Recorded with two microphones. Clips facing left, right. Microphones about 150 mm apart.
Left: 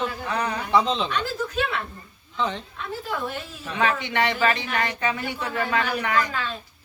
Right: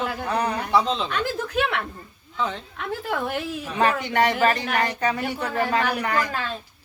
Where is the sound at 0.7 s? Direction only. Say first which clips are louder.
Left 1 dB; 5° right (ahead or behind).